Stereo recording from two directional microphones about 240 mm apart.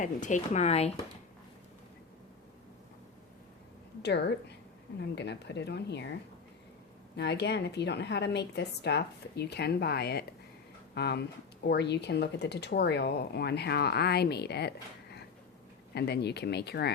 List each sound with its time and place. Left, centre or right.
0.0 s speech: left
4.0 s speech: left
7.2 s speech: left
16.0 s speech: left